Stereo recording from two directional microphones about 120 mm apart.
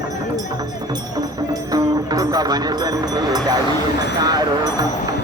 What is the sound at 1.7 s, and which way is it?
Speech, 30° right (ahead or behind).